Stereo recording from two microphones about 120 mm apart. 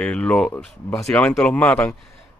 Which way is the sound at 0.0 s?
10° left (ahead or behind).